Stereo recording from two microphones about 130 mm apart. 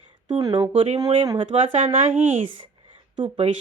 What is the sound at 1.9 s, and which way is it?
Speech, 85° right.